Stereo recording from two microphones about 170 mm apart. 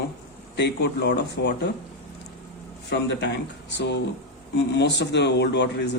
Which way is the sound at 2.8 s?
90° left.